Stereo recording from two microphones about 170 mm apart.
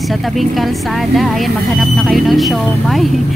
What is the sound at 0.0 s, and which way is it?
Speech, centre (ahead or behind).